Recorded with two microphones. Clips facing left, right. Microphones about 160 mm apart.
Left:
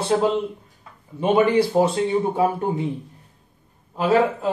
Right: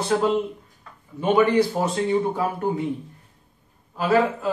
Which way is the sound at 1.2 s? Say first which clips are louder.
Left 1 dB; 25° left (ahead or behind).